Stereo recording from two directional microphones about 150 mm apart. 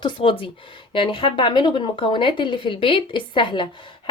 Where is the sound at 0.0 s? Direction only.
35° left (ahead or behind).